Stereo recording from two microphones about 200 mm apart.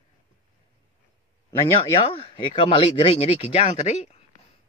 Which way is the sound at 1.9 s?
25° left (ahead or behind).